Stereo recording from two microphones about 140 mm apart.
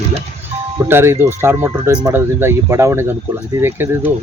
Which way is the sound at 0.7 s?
15° right (ahead or behind).